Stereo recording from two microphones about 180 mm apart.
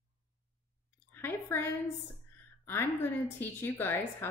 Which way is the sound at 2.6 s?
10° left (ahead or behind).